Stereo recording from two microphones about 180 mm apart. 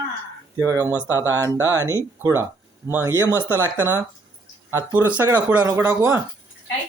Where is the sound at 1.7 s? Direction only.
20° right (ahead or behind).